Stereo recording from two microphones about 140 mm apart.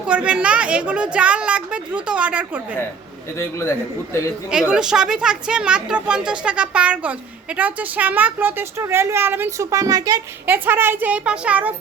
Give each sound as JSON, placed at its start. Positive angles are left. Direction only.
{"t": 0.0, "sound": "speech", "side_deg": -10}
{"t": 3.3, "sound": "a man's voice", "side_deg": 20}
{"t": 4.7, "sound": "speech", "side_deg": -5}
{"t": 10.4, "sound": "speech", "side_deg": -15}